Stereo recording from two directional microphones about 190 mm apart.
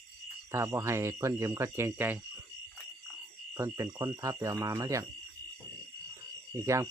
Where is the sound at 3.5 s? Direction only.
15° right (ahead or behind).